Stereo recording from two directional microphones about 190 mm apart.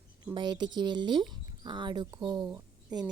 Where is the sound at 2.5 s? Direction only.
10° right (ahead or behind).